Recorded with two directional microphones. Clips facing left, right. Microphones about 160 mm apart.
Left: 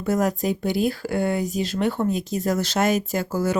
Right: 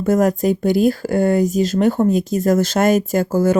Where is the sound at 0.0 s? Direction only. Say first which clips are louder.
Right 7 dB; 50° right (ahead or behind).